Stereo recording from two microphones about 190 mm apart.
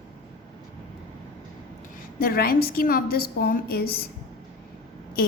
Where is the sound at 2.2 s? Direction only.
50° left (ahead or behind).